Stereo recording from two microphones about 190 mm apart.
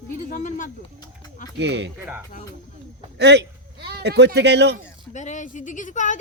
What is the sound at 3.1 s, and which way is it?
Speech, 60° right (ahead or behind).